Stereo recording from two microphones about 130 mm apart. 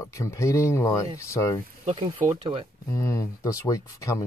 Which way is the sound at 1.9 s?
40° right (ahead or behind).